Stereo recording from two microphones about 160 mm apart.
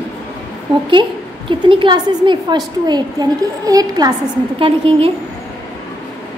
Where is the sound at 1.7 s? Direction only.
30° right (ahead or behind).